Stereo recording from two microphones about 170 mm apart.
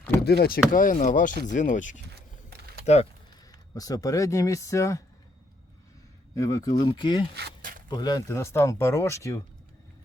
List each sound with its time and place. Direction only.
0.2 s speech: 70° left (ahead or behind); by 2.0 s 50° left (ahead or behind)
2.5 s typing: 70° right (ahead or behind)
2.8 s speech: 40° left (ahead or behind)
3.5 s speech: 20° left (ahead or behind)
6.3 s speech: 20° left (ahead or behind)
7.3 s a sound: 75° right (ahead or behind)
7.9 s speech: 25° left (ahead or behind)